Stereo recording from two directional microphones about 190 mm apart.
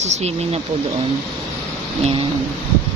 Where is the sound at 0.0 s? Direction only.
35° right (ahead or behind).